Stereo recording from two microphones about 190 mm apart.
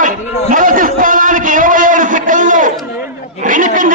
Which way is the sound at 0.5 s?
45° right (ahead or behind).